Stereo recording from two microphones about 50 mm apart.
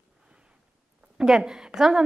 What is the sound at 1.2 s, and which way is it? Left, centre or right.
Speech, centre.